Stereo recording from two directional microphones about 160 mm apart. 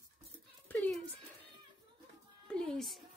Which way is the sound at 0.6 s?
5° left (ahead or behind).